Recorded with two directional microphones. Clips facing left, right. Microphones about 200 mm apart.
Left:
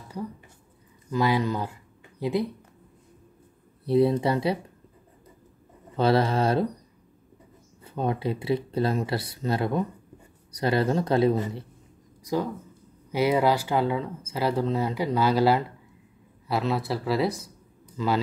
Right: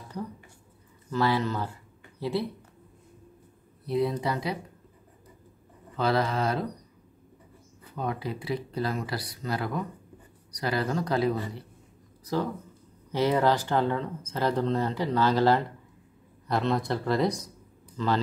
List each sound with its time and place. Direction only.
1.1 s speech: 15° left (ahead or behind)
3.8 s speech: 30° left (ahead or behind)
5.9 s speech: 30° left (ahead or behind)
7.8 s speech: 25° left (ahead or behind)
13.1 s speech: 10° left (ahead or behind)